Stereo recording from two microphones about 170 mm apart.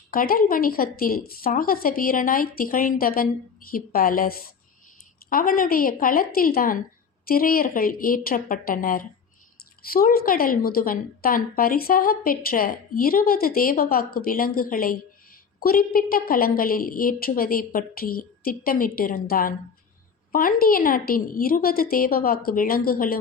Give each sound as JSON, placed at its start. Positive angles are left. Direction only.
{"t": 0.1, "sound": "a woman's voice", "side_deg": 55}